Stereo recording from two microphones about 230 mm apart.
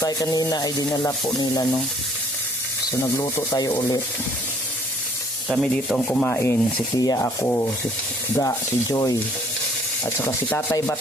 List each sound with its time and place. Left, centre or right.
0.0 s rub: centre
3.0 s rub: centre
5.5 s rub: centre
10.2 s rub: centre